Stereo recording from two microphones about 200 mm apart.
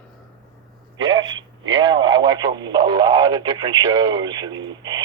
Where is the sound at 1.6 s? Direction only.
25° right (ahead or behind).